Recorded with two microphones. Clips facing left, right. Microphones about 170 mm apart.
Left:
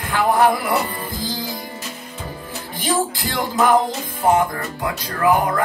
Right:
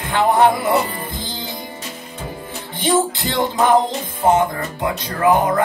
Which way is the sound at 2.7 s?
25° right (ahead or behind).